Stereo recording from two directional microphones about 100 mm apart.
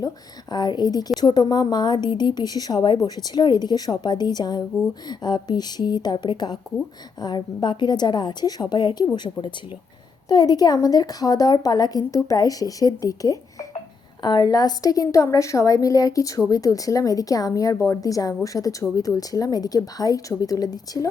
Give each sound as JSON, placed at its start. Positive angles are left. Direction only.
{"t": 0.5, "sound": "a woman's voice", "side_deg": 45}
{"t": 14.2, "sound": "a woman's voice", "side_deg": 50}